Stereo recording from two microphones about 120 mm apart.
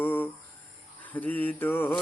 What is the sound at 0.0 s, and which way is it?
Mantra, 15° left (ahead or behind).